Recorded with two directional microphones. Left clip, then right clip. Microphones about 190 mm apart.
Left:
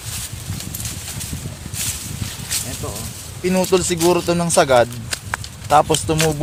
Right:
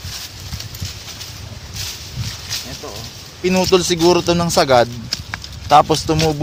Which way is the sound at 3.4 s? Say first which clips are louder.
Right 3 dB; 30° right (ahead or behind).